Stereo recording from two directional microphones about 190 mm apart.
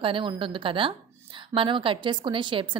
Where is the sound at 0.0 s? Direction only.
25° right (ahead or behind).